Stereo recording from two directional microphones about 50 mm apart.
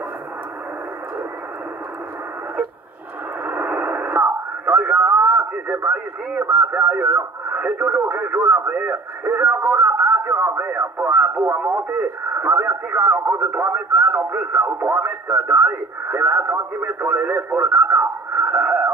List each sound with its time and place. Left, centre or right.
3.4 s a sound: right
4.0 s radio: right
6.5 s speech: right
9.7 s a sound: right
10.3 s speech: right
17.1 s radio: right